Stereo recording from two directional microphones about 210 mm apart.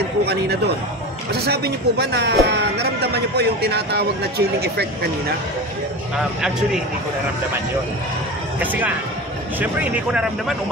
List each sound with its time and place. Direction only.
1.3 s speech: 50° right (ahead or behind)
8.5 s speech: 5° right (ahead or behind)